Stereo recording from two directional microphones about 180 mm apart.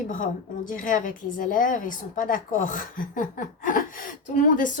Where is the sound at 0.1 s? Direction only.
45° left (ahead or behind).